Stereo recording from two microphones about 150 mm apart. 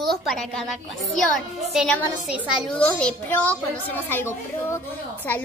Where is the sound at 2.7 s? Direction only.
10° left (ahead or behind).